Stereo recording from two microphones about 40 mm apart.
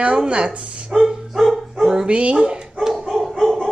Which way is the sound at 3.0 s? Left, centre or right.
Centre.